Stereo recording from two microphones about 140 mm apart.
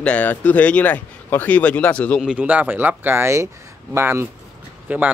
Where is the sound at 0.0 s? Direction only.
10° left (ahead or behind).